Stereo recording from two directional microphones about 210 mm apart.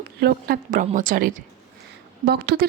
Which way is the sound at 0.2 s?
45° right (ahead or behind).